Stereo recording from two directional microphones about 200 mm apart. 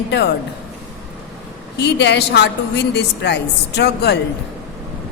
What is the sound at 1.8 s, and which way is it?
A woman's voice, 60° left (ahead or behind).